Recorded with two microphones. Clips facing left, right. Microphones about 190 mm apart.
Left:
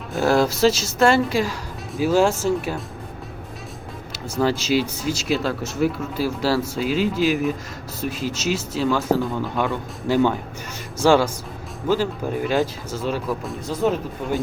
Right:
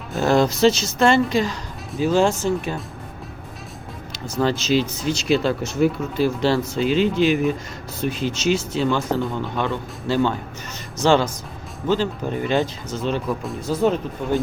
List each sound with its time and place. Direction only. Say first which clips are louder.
0.1 s a woman's voice: right 1 dB; 5° left (ahead or behind)
4.1 s a woman's voice: even; 5° left (ahead or behind)